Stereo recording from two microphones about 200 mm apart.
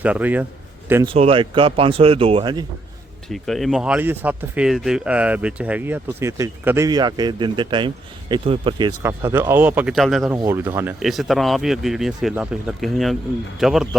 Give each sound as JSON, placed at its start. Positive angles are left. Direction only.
{"t": 0.0, "sound": "speech", "side_deg": -5}
{"t": 1.0, "sound": "speech", "side_deg": -30}
{"t": 3.2, "sound": "speech", "side_deg": 0}
{"t": 9.0, "sound": "speech", "side_deg": -10}
{"t": 10.3, "sound": "speech", "side_deg": -15}